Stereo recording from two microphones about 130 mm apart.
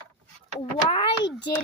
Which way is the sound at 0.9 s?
40° left (ahead or behind).